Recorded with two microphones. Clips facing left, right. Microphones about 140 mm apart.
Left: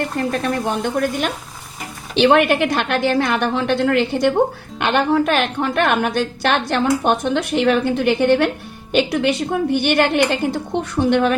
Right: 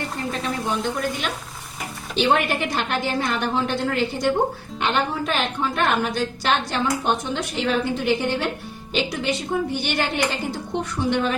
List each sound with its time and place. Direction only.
0.2 s a woman's voice: 60° left (ahead or behind)
2.1 s a woman's voice: 70° left (ahead or behind)